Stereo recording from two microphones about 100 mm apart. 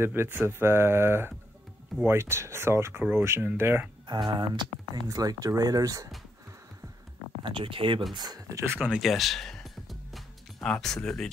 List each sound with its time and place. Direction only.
0.0 s speech: 25° right (ahead or behind)
4.1 s speech: 50° right (ahead or behind)
5.0 s speech: 40° right (ahead or behind)
7.4 s speech: 60° right (ahead or behind)
8.1 s speech: 45° right (ahead or behind)
8.8 s music: centre (ahead or behind)
10.7 s speech: 10° left (ahead or behind)